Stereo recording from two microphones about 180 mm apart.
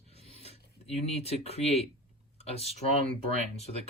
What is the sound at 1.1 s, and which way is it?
Speech, 35° left (ahead or behind).